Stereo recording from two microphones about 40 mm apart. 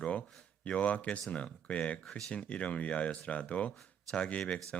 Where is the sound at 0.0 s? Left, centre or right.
Left.